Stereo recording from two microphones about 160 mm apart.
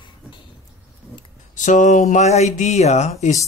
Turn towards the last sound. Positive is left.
turn(degrees=45)  # may be behind; listen again after turning